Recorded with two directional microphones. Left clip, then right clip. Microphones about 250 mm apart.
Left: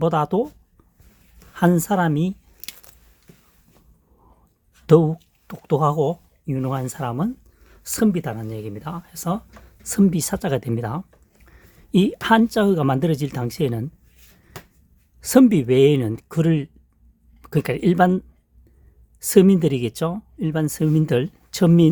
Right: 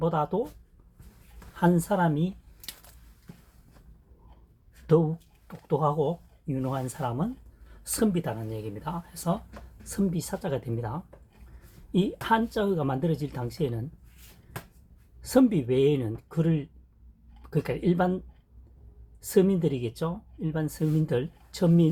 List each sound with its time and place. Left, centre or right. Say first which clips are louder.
0.0 s speech: left 7 dB; left
1.5 s speech: left 6 dB; left
4.9 s speech: left 8 dB; left
15.2 s speech: left 8 dB; left
19.2 s speech: left 8 dB; left